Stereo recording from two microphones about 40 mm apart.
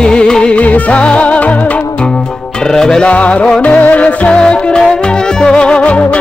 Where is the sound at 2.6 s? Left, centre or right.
Centre.